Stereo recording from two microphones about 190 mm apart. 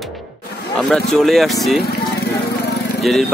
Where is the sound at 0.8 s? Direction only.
Centre (ahead or behind).